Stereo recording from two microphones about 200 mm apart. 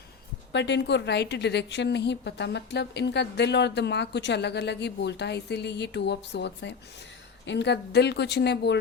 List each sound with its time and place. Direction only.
0.5 s a woman's voice: 60° left (ahead or behind)